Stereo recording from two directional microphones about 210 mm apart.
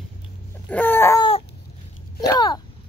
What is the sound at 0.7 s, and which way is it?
Chicken, 10° left (ahead or behind).